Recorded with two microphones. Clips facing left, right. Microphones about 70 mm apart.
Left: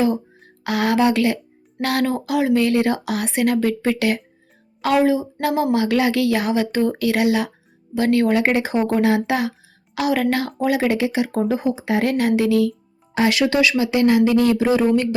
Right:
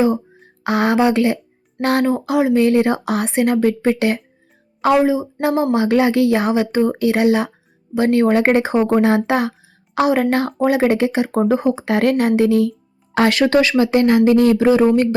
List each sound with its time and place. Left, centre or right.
0.6 s speech: right
4.9 s speech: centre; by 12.3 s right
12.4 s speech: right
13.1 s speech: right